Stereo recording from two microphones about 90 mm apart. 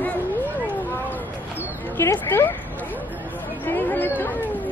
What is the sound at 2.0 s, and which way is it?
Speech, 25° left (ahead or behind).